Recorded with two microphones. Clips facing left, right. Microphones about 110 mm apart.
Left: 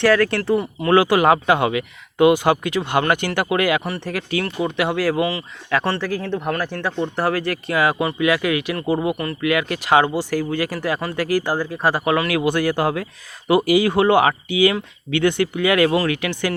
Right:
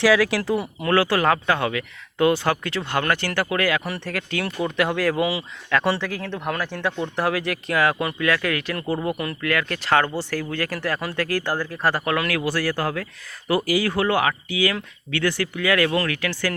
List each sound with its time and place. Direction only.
0.0 s speech: 5° right (ahead or behind)
0.9 s speech: 15° left (ahead or behind)
5.2 s speech: 10° right (ahead or behind)
6.0 s speech: 5° left (ahead or behind)